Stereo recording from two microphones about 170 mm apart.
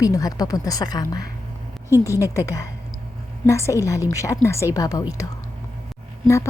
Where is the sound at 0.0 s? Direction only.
20° left (ahead or behind).